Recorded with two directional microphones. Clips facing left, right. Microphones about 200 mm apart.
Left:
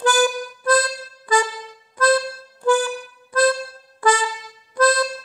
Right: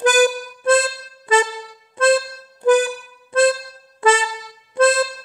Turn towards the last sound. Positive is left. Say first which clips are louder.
# right 3 dB
turn(degrees=-25)  # may be behind; listen again after turning